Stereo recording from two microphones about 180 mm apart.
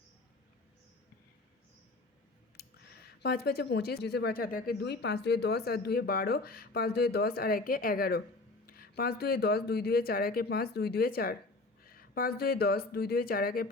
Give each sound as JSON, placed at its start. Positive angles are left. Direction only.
{"t": 2.6, "sound": "speech", "side_deg": 60}